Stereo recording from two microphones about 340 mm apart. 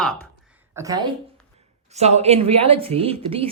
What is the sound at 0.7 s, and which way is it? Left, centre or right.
A woman's voice, centre.